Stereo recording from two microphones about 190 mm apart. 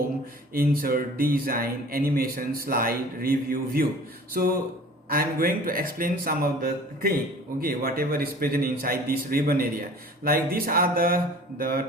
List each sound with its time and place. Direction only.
0.5 s speech: 50° right (ahead or behind)